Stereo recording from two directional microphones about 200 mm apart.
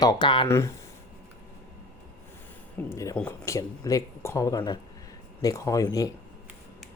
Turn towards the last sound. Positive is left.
turn(degrees=20)  # may be behind; listen again after turning